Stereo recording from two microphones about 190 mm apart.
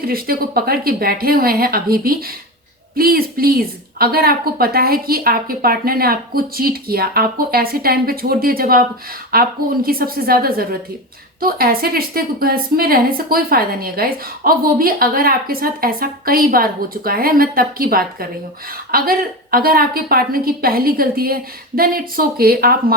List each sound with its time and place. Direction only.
0.0 s a woman's voice: 50° right (ahead or behind)